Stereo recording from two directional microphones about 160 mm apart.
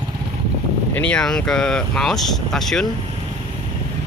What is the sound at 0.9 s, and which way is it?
Speech, 10° left (ahead or behind).